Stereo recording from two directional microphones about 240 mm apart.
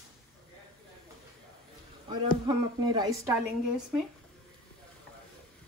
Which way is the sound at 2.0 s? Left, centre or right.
Centre.